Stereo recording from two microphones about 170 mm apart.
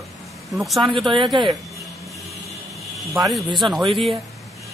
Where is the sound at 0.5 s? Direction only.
Centre (ahead or behind).